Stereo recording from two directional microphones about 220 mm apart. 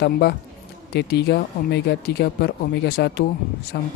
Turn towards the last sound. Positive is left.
turn(degrees=45)  # may be behind; listen again after turning